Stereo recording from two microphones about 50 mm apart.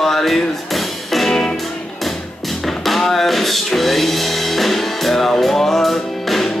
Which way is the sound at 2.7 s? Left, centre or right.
Centre.